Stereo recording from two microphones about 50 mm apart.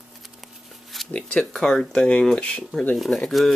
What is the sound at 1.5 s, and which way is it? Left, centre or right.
Speech, centre.